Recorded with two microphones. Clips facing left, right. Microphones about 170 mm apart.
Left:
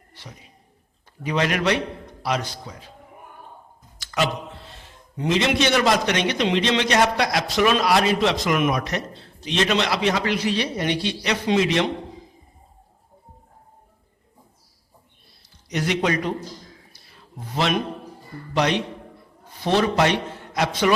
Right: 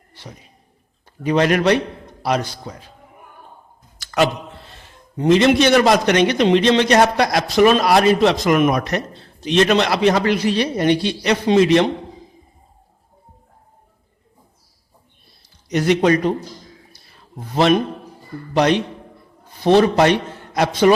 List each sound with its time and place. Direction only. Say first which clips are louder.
1.2 s a man's voice: right 6 dB; 45° right (ahead or behind)
4.0 s a sound: right 6 dB; 50° right (ahead or behind)
5.1 s a man's voice: right 8 dB; 45° right (ahead or behind)
15.7 s a man's voice: right 7 dB; 40° right (ahead or behind)
17.5 s a man's voice: right 8 dB; 45° right (ahead or behind)